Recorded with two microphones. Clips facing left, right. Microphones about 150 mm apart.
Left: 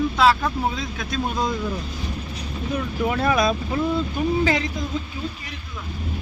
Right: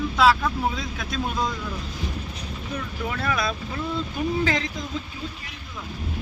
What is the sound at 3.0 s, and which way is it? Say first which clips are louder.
Speech: left 7 dB; 20° left (ahead or behind).